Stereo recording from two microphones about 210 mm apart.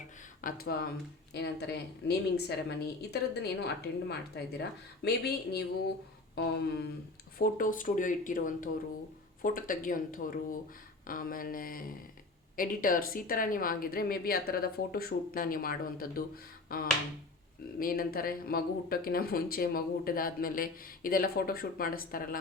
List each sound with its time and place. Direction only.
0.4 s speech: 45° left (ahead or behind)
7.3 s speech: 40° left (ahead or behind)
16.6 s finger snapping: 45° left (ahead or behind)
17.7 s speech: 45° left (ahead or behind)